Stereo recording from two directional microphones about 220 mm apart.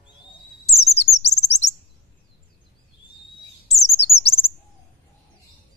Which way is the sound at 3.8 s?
30° left (ahead or behind).